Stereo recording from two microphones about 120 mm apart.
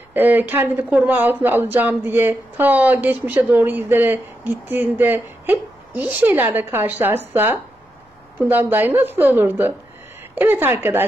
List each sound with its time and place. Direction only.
0.1 s speech: 15° right (ahead or behind)